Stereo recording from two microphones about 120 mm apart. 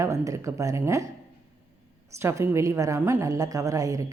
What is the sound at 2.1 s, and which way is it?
A woman's voice, 20° right (ahead or behind).